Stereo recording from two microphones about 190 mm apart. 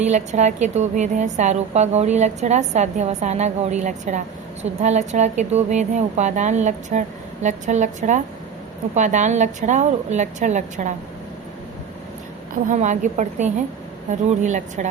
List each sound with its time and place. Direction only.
0.0 s a woman's voice: 40° right (ahead or behind)
12.6 s a woman's voice: 40° right (ahead or behind)